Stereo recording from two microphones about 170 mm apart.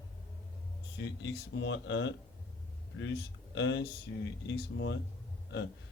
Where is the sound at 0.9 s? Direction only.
90° left.